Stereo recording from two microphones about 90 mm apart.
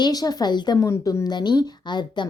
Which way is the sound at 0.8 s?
35° left (ahead or behind).